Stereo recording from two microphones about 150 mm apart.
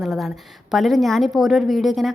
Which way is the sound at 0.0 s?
Centre (ahead or behind).